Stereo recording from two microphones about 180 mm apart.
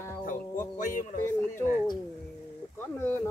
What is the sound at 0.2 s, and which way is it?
Music, 45° left (ahead or behind).